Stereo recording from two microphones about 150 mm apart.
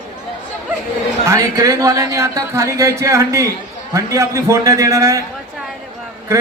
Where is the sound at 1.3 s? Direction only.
25° right (ahead or behind).